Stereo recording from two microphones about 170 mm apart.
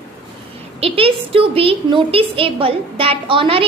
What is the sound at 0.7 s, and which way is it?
A woman's voice, 35° right (ahead or behind).